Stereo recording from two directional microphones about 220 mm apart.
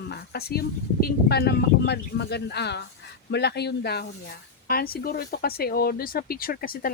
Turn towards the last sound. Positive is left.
turn(degrees=40)  # may be behind; listen again after turning